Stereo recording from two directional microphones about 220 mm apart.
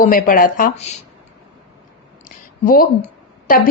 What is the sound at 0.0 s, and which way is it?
Speech, 40° left (ahead or behind).